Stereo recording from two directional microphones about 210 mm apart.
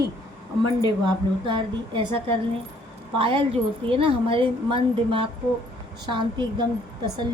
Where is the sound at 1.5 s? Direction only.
25° right (ahead or behind).